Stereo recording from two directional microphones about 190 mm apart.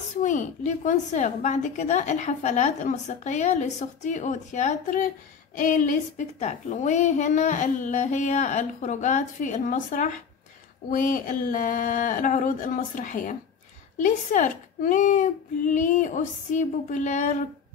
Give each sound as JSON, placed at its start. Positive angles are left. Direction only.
{"t": 0.2, "sound": "a woman's voice", "side_deg": 40}